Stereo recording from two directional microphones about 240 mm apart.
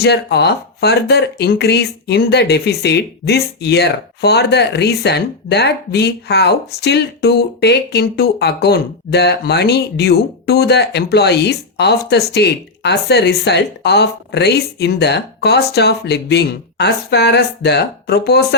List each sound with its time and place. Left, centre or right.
0.0 s speech: left